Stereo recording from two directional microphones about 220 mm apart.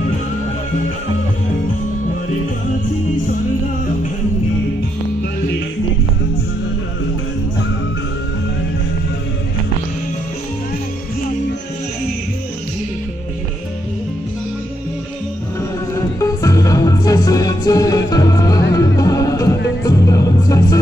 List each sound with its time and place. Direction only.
15.9 s music: 15° left (ahead or behind)